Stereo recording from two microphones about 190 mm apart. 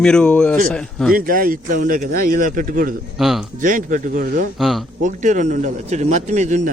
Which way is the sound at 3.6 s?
45° right (ahead or behind).